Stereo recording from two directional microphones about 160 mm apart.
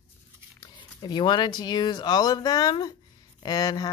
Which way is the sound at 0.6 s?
25° left (ahead or behind).